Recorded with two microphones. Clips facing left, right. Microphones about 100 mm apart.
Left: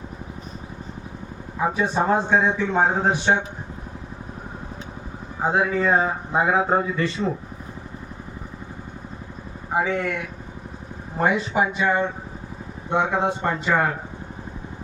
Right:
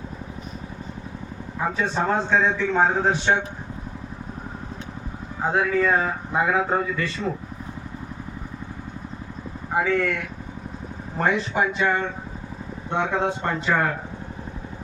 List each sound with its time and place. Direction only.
1.7 s a man's voice: 10° left (ahead or behind)
5.4 s speech: 20° left (ahead or behind)
9.7 s a man's voice: 20° left (ahead or behind)
11.2 s a man's voice: 10° left (ahead or behind)